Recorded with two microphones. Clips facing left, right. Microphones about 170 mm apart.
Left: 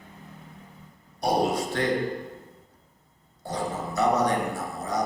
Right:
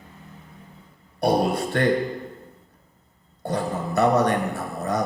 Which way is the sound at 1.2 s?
60° right (ahead or behind).